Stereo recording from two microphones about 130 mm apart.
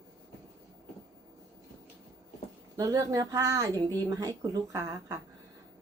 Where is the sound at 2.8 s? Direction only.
25° right (ahead or behind).